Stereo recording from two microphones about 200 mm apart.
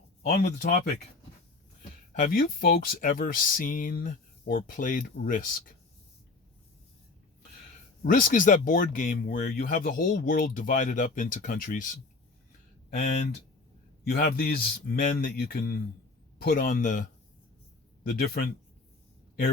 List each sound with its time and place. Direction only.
0.4 s speech: 50° left (ahead or behind)
2.1 s speech: 45° left (ahead or behind)
8.0 s speech: 45° left (ahead or behind)
14.0 s speech: 50° left (ahead or behind)